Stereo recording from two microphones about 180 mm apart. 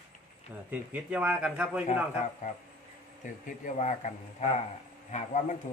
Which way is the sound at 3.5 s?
45° left (ahead or behind).